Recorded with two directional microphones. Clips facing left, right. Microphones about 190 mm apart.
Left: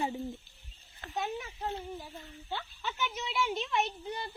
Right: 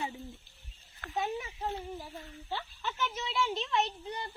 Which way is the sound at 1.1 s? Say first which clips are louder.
Right 2 dB; centre (ahead or behind).